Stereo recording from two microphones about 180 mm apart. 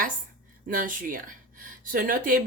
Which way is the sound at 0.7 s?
50° right (ahead or behind).